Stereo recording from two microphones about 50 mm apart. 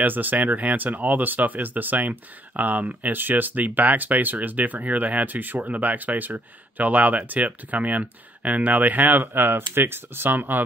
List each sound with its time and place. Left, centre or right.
0.0 s speech: right